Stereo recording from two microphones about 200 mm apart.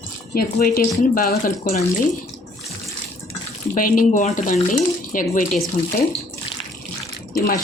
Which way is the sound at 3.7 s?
45° left (ahead or behind).